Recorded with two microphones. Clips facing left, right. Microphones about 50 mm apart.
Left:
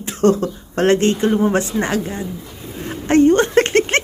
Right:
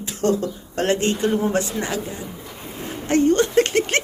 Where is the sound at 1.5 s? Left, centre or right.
Left.